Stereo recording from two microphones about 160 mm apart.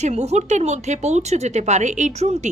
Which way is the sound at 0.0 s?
45° right (ahead or behind).